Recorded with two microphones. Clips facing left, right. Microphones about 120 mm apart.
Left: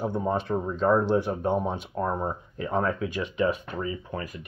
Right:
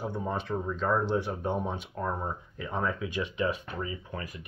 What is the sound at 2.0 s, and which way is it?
Speech, 25° left (ahead or behind).